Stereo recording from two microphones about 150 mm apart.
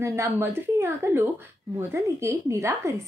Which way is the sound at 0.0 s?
20° right (ahead or behind).